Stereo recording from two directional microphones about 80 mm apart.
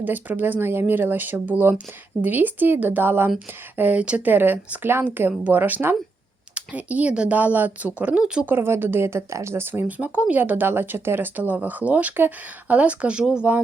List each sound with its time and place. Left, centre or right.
0.0 s speech: right
9.8 s speech: centre